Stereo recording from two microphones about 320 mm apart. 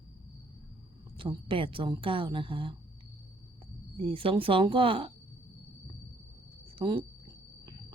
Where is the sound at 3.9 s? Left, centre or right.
Centre.